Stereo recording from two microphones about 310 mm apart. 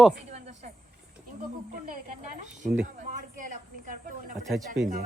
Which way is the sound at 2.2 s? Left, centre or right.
Right.